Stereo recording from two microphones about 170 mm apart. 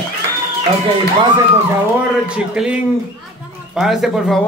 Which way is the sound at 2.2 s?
5° right (ahead or behind).